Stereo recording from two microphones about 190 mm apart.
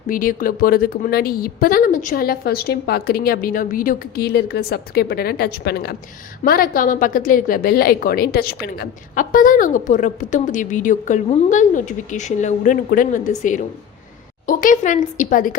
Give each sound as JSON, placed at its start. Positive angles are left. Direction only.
{"t": 0.1, "sound": "a woman's voice", "side_deg": 50}